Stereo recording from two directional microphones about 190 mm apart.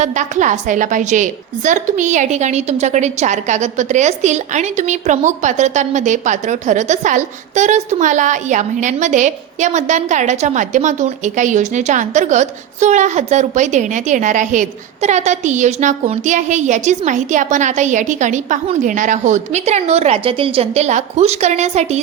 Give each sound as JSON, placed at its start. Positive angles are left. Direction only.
{"t": 0.0, "sound": "a woman's voice", "side_deg": -40}